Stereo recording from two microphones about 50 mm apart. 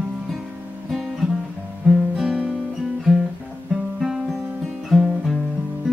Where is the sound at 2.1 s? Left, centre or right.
Centre.